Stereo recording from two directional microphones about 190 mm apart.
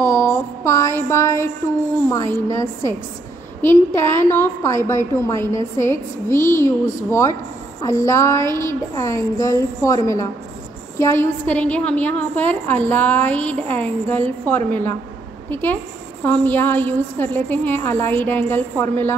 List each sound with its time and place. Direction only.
0.0 s a sound: 15° left (ahead or behind)
2.0 s a woman's voice: 15° left (ahead or behind)
3.9 s a woman's voice: 15° left (ahead or behind)